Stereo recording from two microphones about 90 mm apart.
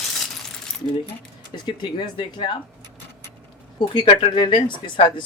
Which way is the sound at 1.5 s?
55° left (ahead or behind).